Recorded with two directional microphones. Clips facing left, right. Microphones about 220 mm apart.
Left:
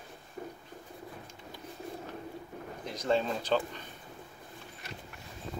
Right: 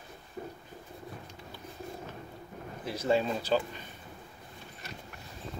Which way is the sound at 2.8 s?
5° right (ahead or behind).